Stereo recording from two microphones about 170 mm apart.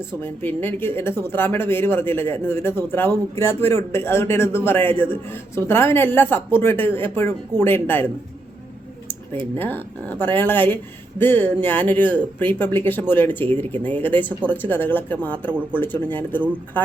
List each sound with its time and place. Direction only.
0.2 s speech: 10° left (ahead or behind)
9.6 s speech: 10° left (ahead or behind)